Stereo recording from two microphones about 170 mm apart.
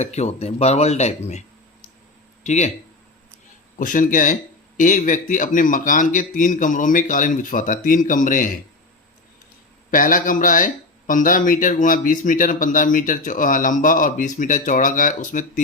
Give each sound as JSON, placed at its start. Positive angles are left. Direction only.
{"t": 0.0, "sound": "speech", "side_deg": 40}
{"t": 3.8, "sound": "speech", "side_deg": 50}
{"t": 9.9, "sound": "speech", "side_deg": 50}